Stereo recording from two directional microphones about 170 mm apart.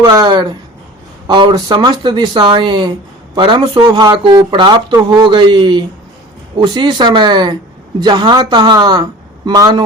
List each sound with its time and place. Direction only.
0.0 s speech: 25° right (ahead or behind)